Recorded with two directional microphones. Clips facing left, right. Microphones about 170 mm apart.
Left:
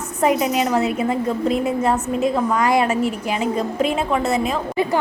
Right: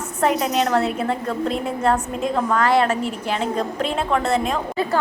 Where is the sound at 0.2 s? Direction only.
5° left (ahead or behind).